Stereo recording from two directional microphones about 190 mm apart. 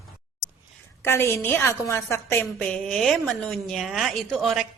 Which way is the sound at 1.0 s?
15° left (ahead or behind).